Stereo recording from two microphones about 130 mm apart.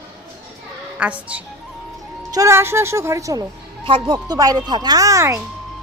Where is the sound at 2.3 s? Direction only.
25° right (ahead or behind).